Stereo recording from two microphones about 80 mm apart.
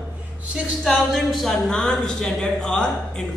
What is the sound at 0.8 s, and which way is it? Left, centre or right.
A woman's voice, centre.